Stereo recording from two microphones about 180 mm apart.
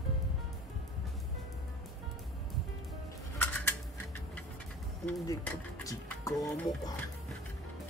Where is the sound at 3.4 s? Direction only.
10° left (ahead or behind).